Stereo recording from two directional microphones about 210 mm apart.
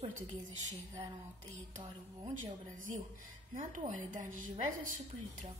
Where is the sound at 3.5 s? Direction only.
35° right (ahead or behind).